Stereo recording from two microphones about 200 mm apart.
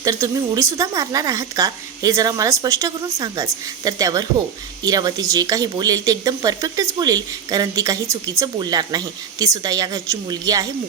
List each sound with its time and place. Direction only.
0.0 s speech: 15° right (ahead or behind)